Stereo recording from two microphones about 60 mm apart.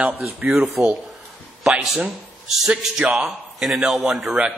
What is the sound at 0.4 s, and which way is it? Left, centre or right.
Speech, right.